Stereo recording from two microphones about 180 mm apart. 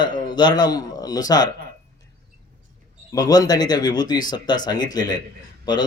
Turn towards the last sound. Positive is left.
turn(degrees=20)  # may be behind; listen again after turning